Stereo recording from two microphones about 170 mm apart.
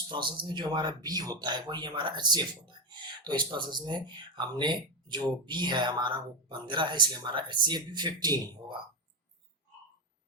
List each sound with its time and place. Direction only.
0.1 s speech: 30° right (ahead or behind)